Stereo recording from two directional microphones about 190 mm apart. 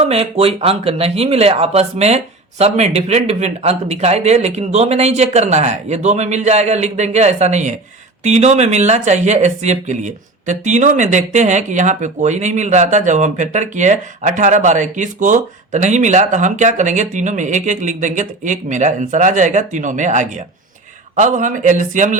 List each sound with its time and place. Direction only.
0.0 s speech: 30° right (ahead or behind)